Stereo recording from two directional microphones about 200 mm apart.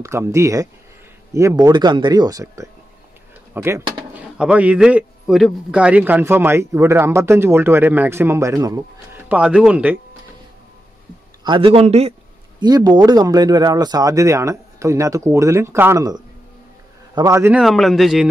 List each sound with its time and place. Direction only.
0.0 s a man's voice: 15° right (ahead or behind)
11.4 s speech: 25° right (ahead or behind)
12.5 s a man's voice: 20° right (ahead or behind)
17.6 s a man's voice: centre (ahead or behind)